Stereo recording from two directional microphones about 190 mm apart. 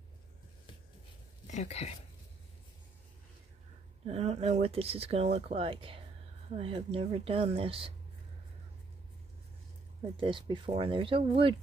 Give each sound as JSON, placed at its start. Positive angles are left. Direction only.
{"t": 1.5, "sound": "speech", "side_deg": 35}
{"t": 4.1, "sound": "speech", "side_deg": -35}
{"t": 10.1, "sound": "speech", "side_deg": -25}